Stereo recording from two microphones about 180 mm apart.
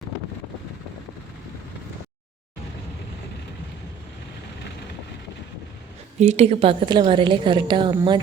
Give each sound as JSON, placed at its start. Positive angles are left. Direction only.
{"t": 6.1, "sound": "a woman's voice", "side_deg": -40}